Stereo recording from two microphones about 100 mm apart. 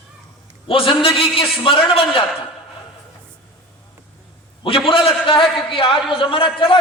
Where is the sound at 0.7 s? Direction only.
65° left (ahead or behind).